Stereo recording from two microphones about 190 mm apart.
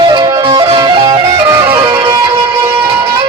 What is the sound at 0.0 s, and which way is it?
Music, 20° right (ahead or behind).